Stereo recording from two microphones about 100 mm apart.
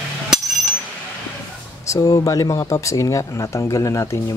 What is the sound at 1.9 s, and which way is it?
Speech, 40° left (ahead or behind).